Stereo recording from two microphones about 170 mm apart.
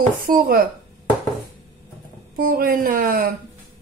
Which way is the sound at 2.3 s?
55° right (ahead or behind).